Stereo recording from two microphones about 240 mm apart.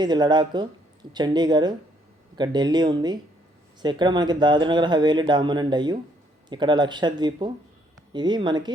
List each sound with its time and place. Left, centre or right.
0.0 s speech: centre